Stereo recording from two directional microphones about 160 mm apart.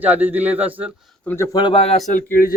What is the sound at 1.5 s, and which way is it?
Speech, 35° left (ahead or behind).